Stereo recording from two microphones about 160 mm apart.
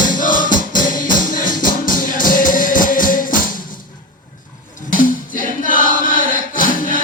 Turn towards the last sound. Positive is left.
turn(degrees=55)  # may be behind; listen again after turning